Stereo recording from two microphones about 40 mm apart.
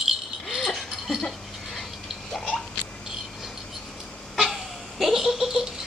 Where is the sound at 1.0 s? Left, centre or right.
Centre.